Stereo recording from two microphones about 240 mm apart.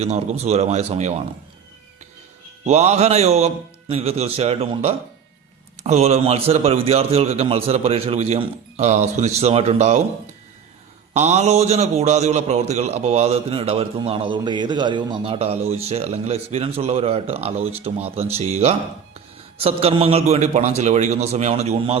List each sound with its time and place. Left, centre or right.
0.0 s a man's voice: right
2.6 s a man's voice: right
11.1 s a man's voice: right